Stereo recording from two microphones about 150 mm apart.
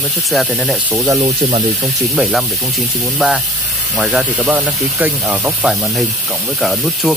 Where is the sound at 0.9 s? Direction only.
10° right (ahead or behind).